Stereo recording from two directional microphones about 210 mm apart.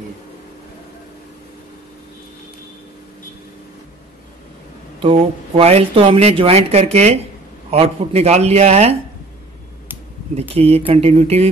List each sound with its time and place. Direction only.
5.0 s speech: 30° right (ahead or behind)
10.5 s speech: 30° right (ahead or behind)